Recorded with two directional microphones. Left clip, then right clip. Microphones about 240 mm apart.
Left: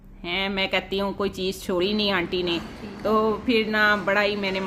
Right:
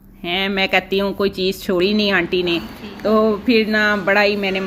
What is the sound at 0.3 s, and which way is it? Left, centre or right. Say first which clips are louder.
Speech: right 7 dB; centre.